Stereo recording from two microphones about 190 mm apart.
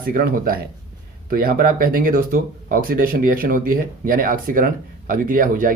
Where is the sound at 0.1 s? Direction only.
50° right (ahead or behind).